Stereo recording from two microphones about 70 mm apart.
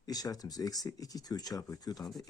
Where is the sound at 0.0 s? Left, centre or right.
Left.